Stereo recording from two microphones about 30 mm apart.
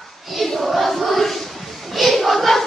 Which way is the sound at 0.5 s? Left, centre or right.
Centre.